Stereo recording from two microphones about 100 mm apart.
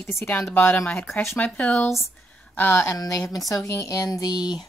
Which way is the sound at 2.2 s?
15° left (ahead or behind).